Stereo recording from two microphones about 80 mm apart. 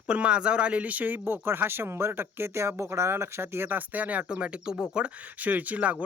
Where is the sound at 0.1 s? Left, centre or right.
Centre.